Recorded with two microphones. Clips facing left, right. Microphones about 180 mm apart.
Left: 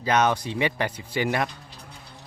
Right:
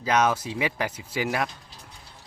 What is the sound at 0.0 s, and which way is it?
Speech, 5° right (ahead or behind).